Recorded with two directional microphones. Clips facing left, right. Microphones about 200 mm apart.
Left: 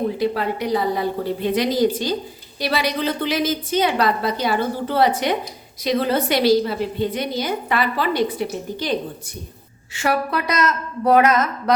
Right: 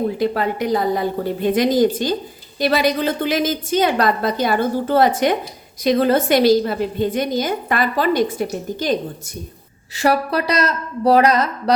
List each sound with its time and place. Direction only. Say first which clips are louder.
0.2 s a woman's voice: right 2 dB; 50° right (ahead or behind)